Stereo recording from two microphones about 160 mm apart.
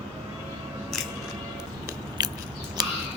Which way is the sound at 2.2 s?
25° right (ahead or behind).